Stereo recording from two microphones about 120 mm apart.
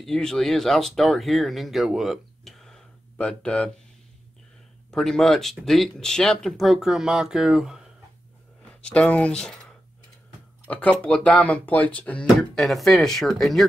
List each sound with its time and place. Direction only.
0.0 s speech: 5° left (ahead or behind)
4.9 s speech: 5° left (ahead or behind)
8.8 s speech: 10° left (ahead or behind)